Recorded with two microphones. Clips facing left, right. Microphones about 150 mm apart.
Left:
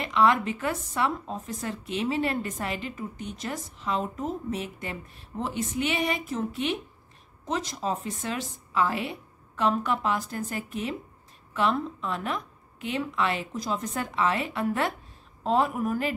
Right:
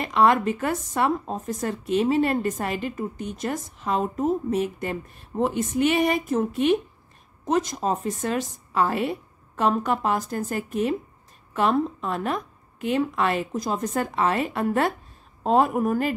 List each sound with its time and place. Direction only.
0.0 s a woman's voice: 45° right (ahead or behind)